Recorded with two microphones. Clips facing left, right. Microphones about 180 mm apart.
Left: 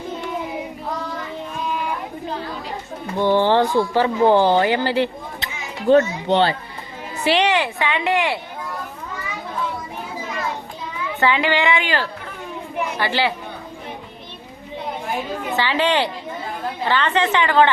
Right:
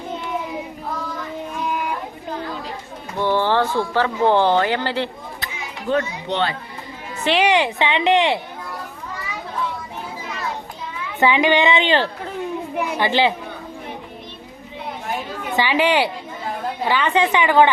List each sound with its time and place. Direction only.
3.2 s speech: 15° left (ahead or behind)
5.9 s speech: 35° left (ahead or behind)
7.4 s a woman's voice: 15° right (ahead or behind)
11.2 s a woman's voice: 15° right (ahead or behind)
15.5 s a woman's voice: 15° right (ahead or behind)